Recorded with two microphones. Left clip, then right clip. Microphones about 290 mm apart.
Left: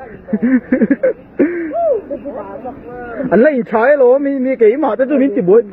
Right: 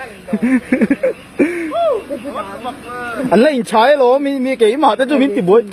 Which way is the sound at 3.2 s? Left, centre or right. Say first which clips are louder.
Left 1 dB; centre.